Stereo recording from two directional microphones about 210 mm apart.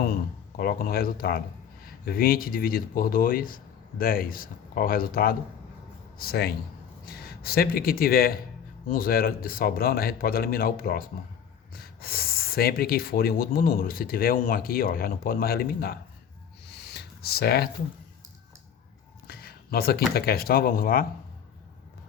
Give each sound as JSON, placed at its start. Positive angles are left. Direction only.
{"t": 0.0, "sound": "speech", "side_deg": 45}
{"t": 16.9, "sound": "a sound", "side_deg": 50}
{"t": 19.3, "sound": "speech", "side_deg": 45}